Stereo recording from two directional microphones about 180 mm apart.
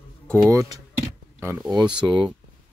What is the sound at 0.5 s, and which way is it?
Speech, 20° right (ahead or behind).